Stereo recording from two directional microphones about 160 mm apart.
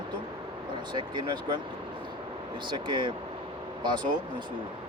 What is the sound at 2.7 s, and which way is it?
Speech, 30° right (ahead or behind).